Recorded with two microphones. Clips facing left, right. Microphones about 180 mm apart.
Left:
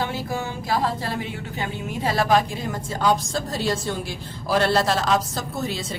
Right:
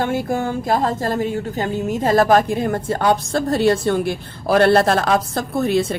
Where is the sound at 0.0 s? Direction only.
50° right (ahead or behind).